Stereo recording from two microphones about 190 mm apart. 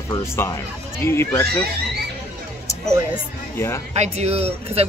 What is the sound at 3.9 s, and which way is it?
Speech, 35° right (ahead or behind).